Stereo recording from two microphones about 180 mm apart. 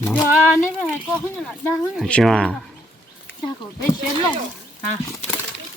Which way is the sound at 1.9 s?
5° left (ahead or behind).